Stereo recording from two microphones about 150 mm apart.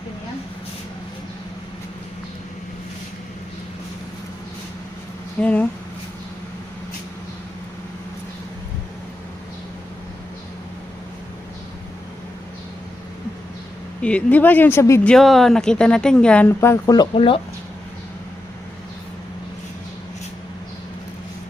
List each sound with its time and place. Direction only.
5.4 s speech: 10° left (ahead or behind)
14.0 s speech: 10° left (ahead or behind)
15.1 s speech: centre (ahead or behind); by 17.1 s 25° left (ahead or behind)
17.2 s speech: 35° left (ahead or behind)